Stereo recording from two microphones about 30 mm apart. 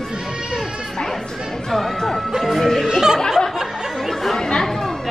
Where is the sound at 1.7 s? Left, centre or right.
Centre.